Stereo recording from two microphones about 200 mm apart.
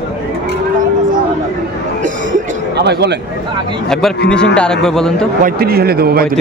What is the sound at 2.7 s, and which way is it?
Speech, 55° right (ahead or behind).